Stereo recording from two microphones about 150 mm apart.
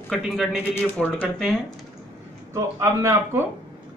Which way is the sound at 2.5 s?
20° right (ahead or behind).